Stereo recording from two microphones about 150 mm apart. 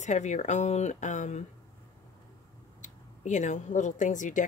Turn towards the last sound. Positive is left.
turn(degrees=55)  # may be behind; listen again after turning